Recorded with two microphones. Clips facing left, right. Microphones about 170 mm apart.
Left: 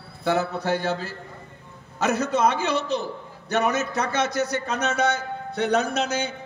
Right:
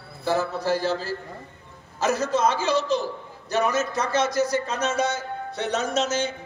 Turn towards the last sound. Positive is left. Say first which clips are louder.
# right 1 dB
turn(degrees=60)  # may be behind; listen again after turning